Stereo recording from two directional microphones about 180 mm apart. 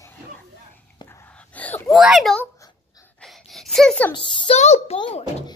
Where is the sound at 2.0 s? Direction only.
Centre (ahead or behind).